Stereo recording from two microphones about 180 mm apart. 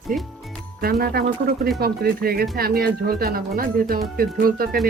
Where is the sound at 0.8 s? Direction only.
60° right (ahead or behind).